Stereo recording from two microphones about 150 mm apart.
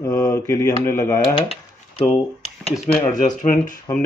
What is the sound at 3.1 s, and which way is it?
Speech, 60° left (ahead or behind).